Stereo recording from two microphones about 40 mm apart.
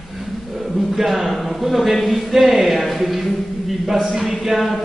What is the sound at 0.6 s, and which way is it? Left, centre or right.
A man's voice, centre.